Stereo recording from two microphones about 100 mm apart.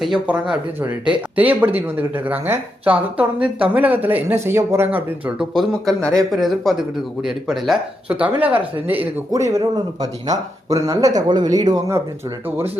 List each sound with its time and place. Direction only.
0.3 s speech: 10° right (ahead or behind)
5.4 s speech: centre (ahead or behind)
8.0 s speech: 15° right (ahead or behind)
9.3 s speech: 30° right (ahead or behind)